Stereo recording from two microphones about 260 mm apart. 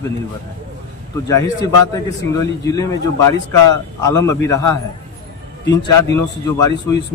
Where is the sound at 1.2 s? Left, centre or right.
Centre.